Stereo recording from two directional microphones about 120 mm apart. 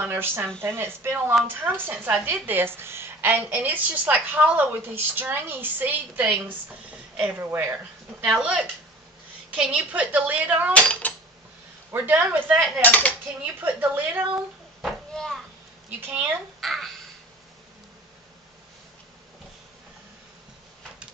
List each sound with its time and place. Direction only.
0.0 s a woman's voice: 20° right (ahead or behind)
8.3 s a woman's voice: 5° right (ahead or behind)
10.7 s speech: 10° left (ahead or behind)
11.9 s a woman's voice: 15° right (ahead or behind)
12.8 s speech: 15° left (ahead or behind)
13.6 s a woman's voice: 15° right (ahead or behind)
14.8 s a sound: centre (ahead or behind)
16.1 s a woman's voice: 15° right (ahead or behind)
16.6 s babbling: centre (ahead or behind)